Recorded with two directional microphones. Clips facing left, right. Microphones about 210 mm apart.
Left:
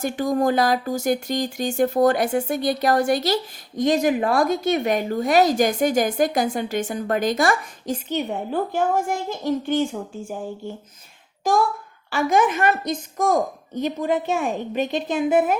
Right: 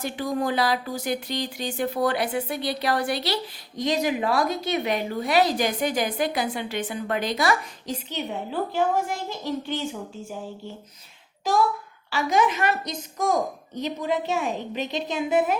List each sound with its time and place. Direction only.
0.0 s speech: 45° left (ahead or behind)
12.1 s speech: 50° left (ahead or behind)